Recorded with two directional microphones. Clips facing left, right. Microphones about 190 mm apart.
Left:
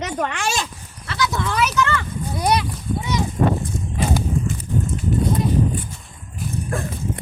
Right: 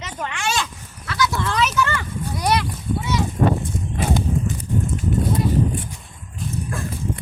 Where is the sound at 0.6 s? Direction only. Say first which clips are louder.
Right 1 dB; 25° left (ahead or behind).